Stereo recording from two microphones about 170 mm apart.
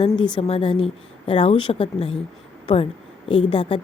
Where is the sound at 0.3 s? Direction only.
35° left (ahead or behind).